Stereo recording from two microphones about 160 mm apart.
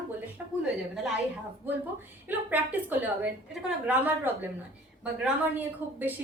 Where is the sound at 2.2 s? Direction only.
10° right (ahead or behind).